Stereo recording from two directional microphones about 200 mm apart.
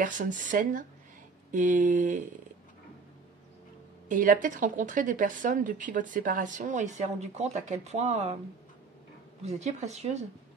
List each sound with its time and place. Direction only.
0.0 s a woman's voice: 40° right (ahead or behind)
4.1 s a woman's voice: 40° right (ahead or behind)
9.4 s a woman's voice: 35° right (ahead or behind)